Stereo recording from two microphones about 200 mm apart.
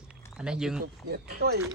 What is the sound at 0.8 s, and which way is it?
Speech, 55° right (ahead or behind).